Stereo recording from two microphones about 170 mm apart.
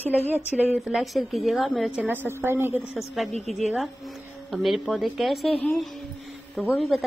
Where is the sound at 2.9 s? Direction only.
Centre (ahead or behind).